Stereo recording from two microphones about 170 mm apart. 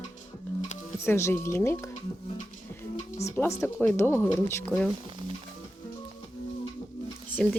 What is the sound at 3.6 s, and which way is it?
Speech, 15° left (ahead or behind).